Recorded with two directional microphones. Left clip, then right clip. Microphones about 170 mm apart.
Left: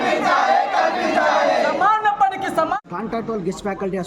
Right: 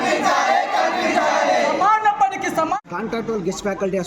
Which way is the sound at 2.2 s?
10° left (ahead or behind).